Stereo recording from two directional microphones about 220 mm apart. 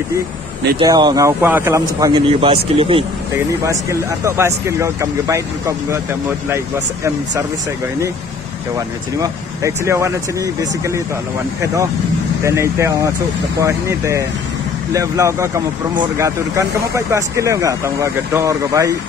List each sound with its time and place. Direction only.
0.7 s speech: 20° right (ahead or behind)
3.6 s speech: 15° right (ahead or behind)
9.2 s speech: 15° right (ahead or behind)